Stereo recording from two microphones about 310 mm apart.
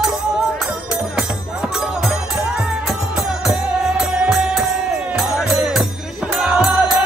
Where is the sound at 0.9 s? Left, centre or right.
Centre.